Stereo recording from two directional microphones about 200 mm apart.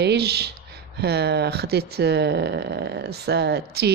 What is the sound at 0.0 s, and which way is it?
Speech, 55° right (ahead or behind).